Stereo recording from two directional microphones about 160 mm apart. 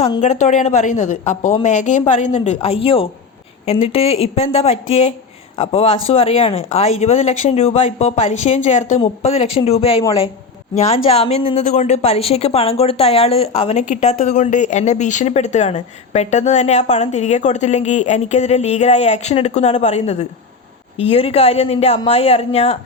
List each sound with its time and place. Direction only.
0.0 s a woman's voice: 45° left (ahead or behind)